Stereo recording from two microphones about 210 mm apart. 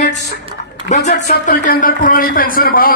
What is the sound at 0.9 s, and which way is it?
A man's voice, 35° left (ahead or behind).